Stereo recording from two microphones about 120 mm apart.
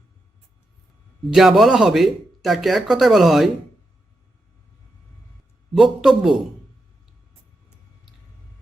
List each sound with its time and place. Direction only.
1.3 s speech: centre (ahead or behind)
5.7 s speech: 5° right (ahead or behind)